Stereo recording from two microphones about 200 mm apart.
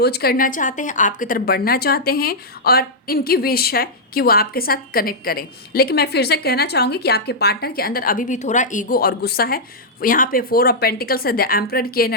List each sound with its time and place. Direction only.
0.0 s a woman's voice: 50° left (ahead or behind)